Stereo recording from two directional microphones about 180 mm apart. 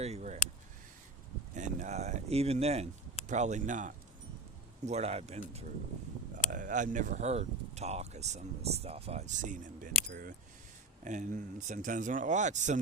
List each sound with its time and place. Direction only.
0.0 s speech: 40° right (ahead or behind)
1.5 s speech: 40° right (ahead or behind)
6.3 s speech: 45° right (ahead or behind)
10.1 s speech: 55° right (ahead or behind)
11.0 s speech: 45° right (ahead or behind)